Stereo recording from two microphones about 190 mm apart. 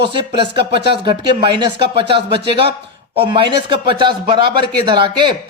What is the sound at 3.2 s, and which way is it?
A man's voice, 25° right (ahead or behind).